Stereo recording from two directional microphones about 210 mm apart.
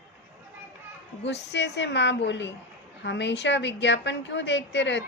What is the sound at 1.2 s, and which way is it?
A woman's voice, 55° left (ahead or behind).